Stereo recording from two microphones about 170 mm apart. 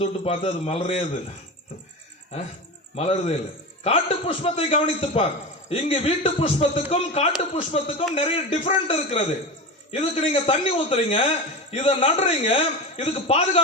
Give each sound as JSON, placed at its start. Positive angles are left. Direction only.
{"t": 0.0, "sound": "a man's voice", "side_deg": 35}
{"t": 2.9, "sound": "a man's voice", "side_deg": 35}